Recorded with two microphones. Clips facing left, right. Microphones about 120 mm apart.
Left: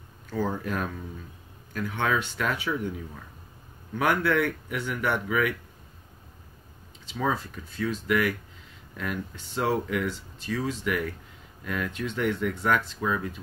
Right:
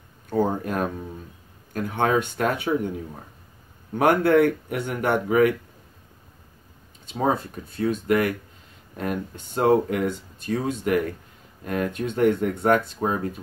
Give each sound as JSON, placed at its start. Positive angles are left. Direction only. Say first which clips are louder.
{"t": 0.3, "sound": "speech", "louder": "right 6 dB", "side_deg": -50}
{"t": 7.1, "sound": "speech", "louder": "right 5 dB", "side_deg": -45}